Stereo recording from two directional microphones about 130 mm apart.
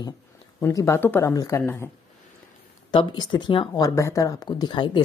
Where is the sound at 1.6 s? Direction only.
15° left (ahead or behind).